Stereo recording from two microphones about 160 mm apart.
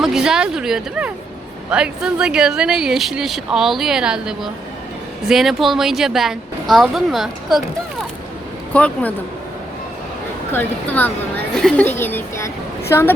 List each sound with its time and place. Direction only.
0.0 s speech: 5° right (ahead or behind)
8.7 s a woman's voice: 10° left (ahead or behind)
10.5 s a woman's voice: 10° left (ahead or behind)